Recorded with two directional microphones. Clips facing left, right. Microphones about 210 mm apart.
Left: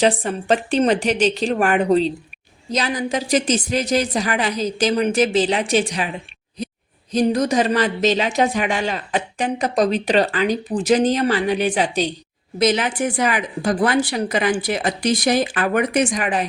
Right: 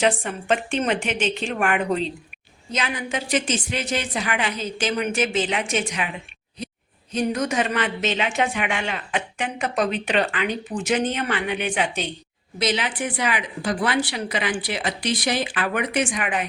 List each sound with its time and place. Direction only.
0.0 s speech: 35° left (ahead or behind)
7.1 s speech: 35° left (ahead or behind)